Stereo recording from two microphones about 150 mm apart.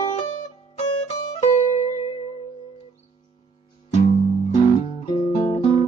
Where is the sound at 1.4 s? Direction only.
45° left (ahead or behind).